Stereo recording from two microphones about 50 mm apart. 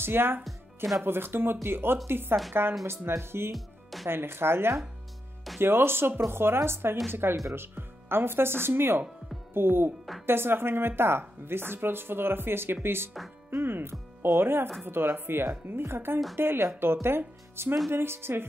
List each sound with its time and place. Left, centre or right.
0.0 s a woman's voice: right
3.5 s music: centre
4.1 s a woman's voice: right